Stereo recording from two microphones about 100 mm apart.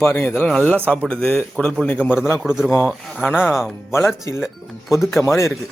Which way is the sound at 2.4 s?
5° right (ahead or behind).